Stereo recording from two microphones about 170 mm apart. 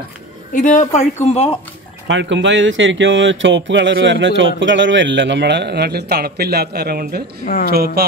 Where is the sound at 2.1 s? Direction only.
90° right.